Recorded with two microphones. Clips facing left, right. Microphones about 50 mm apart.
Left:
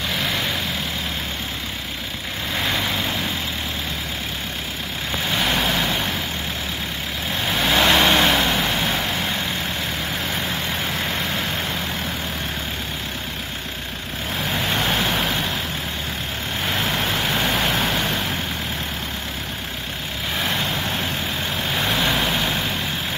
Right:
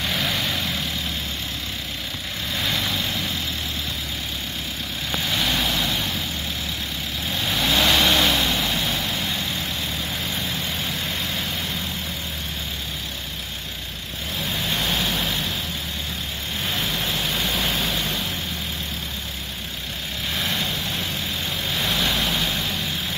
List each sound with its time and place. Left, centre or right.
0.1 s vehicle: centre
2.6 s vehicle: left
5.4 s vehicle: left
7.4 s vehicle: left
14.5 s vehicle: left
16.7 s vehicle: left
21.7 s vehicle: left